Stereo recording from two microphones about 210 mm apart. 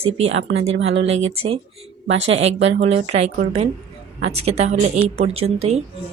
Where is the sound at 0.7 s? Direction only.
60° right (ahead or behind).